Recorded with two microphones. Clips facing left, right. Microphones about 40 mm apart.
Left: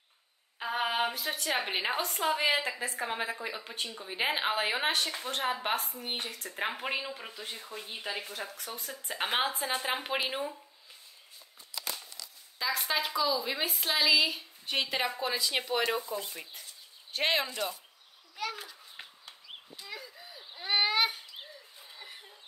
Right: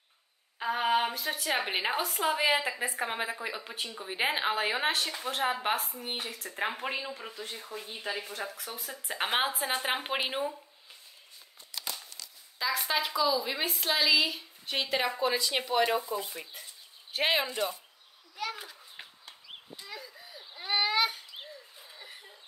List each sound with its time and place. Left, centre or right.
0.6 s a woman's voice: centre
4.3 s a woman's voice: centre
8.1 s a woman's voice: centre
12.5 s a woman's voice: centre
18.3 s children playing: centre
18.6 s a sound: centre
20.6 s a sound: centre